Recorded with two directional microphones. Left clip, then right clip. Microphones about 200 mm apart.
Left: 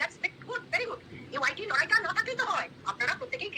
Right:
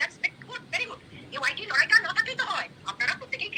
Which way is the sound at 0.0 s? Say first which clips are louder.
Right 3 dB; 40° left (ahead or behind).